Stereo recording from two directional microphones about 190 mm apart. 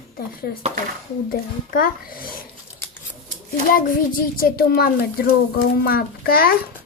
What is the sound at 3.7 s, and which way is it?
A child's voice, 45° left (ahead or behind).